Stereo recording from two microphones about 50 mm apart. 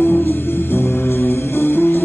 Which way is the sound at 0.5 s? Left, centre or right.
Left.